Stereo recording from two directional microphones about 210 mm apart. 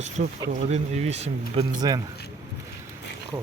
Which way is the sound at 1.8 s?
20° right (ahead or behind).